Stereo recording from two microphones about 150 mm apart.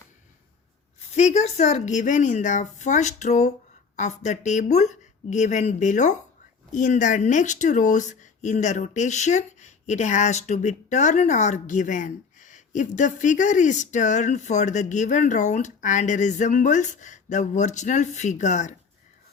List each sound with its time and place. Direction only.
1.1 s speech: 50° left (ahead or behind)